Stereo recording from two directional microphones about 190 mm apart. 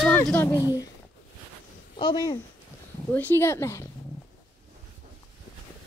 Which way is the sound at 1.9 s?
20° left (ahead or behind).